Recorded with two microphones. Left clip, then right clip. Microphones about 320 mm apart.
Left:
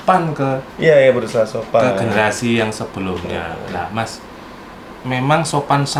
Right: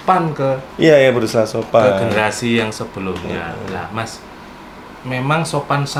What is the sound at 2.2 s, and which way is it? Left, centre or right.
Speech, centre.